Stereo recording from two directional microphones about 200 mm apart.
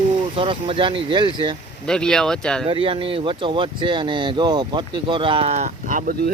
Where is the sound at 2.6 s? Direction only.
25° right (ahead or behind); by 6.3 s 45° right (ahead or behind).